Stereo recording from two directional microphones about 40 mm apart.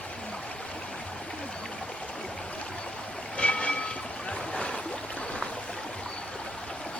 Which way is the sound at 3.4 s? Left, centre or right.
Left.